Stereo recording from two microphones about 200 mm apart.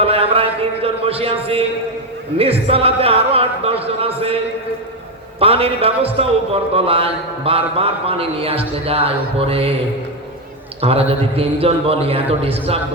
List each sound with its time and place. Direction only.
0.0 s a man's voice: 30° right (ahead or behind)
5.4 s a man's voice: 30° right (ahead or behind)
10.8 s a man's voice: 30° right (ahead or behind)